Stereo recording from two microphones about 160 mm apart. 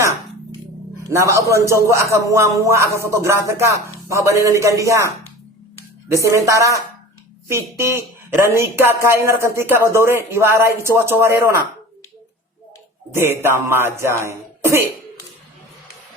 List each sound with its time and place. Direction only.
1.1 s a man's voice: 20° right (ahead or behind)
6.2 s a man's voice: 20° right (ahead or behind)
13.1 s a man's voice: 15° right (ahead or behind)